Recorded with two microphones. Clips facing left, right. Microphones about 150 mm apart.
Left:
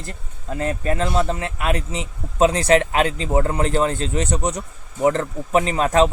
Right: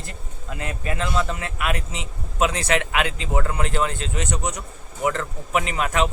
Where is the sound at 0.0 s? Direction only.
35° left (ahead or behind).